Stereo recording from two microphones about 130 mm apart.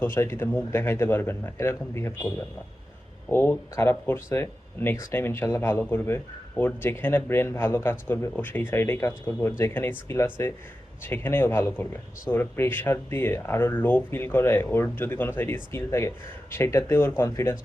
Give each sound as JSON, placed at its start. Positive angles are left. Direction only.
{"t": 0.0, "sound": "speech", "side_deg": 20}